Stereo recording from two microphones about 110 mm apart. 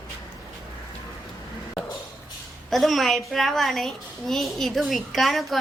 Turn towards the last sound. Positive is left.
turn(degrees=0)  # may be behind; listen again after turning